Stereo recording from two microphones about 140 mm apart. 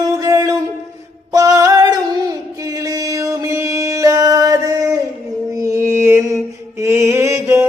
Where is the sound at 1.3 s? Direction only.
25° right (ahead or behind).